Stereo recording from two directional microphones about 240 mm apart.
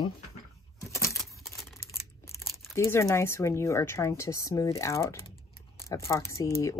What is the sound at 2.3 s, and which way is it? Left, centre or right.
Speech, centre.